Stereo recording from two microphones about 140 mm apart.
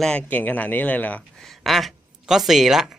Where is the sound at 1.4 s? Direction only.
Centre (ahead or behind).